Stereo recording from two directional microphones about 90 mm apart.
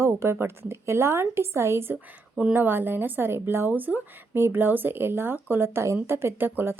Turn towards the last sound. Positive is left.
turn(degrees=-25)  # may be behind; listen again after turning